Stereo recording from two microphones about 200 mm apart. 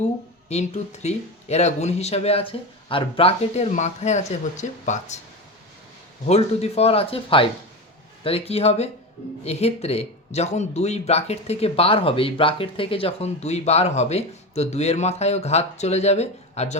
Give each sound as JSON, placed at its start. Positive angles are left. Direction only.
{"t": 0.4, "sound": "speech", "side_deg": 35}
{"t": 6.2, "sound": "speech", "side_deg": 30}